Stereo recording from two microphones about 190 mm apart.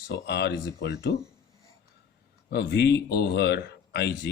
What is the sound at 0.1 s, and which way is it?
Speech, 60° left (ahead or behind).